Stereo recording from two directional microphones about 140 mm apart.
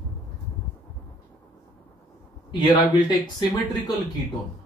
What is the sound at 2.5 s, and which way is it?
A man's voice, 30° left (ahead or behind).